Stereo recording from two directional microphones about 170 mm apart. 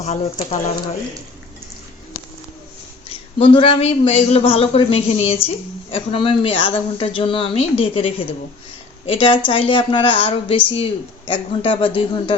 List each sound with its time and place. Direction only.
0.0 s a woman's voice: 40° left (ahead or behind)
3.3 s a woman's voice: 35° left (ahead or behind)